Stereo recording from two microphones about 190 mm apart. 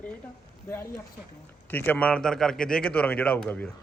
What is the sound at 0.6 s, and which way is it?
A man's voice, 10° left (ahead or behind).